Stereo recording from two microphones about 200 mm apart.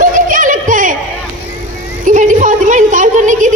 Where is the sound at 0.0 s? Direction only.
40° right (ahead or behind).